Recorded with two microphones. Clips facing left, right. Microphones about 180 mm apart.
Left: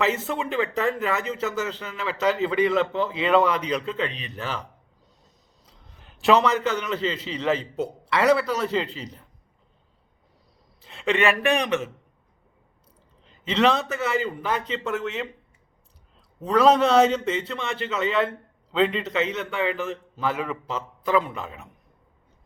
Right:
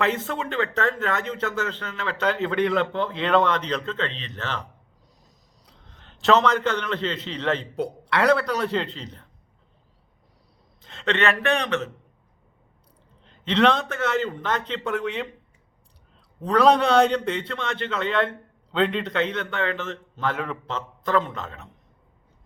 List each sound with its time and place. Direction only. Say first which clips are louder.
0.0 s speech: even; 5° left (ahead or behind)
5.6 s a man's voice: right 1 dB; 5° left (ahead or behind)
10.8 s a man's voice: left 1 dB; 5° left (ahead or behind)
13.2 s a man's voice: right 1 dB; 5° left (ahead or behind)
16.4 s a man's voice: even; 5° left (ahead or behind)